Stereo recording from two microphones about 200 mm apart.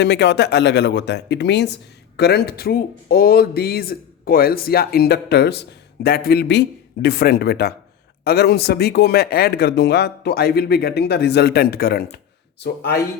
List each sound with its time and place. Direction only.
0.0 s speech: 60° left (ahead or behind)